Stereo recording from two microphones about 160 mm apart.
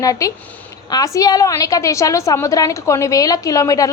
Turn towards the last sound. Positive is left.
turn(degrees=20)  # may be behind; listen again after turning